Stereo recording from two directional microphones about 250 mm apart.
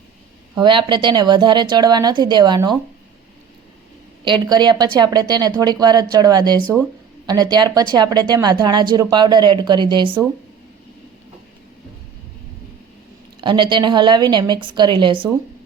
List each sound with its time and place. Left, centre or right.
0.5 s a woman's voice: centre
4.2 s a woman's voice: centre
13.4 s a woman's voice: centre